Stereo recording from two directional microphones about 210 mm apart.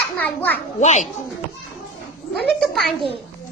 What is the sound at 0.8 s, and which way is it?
Speech, 35° left (ahead or behind).